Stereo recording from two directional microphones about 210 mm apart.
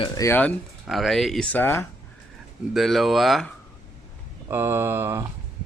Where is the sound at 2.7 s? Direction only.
Centre (ahead or behind).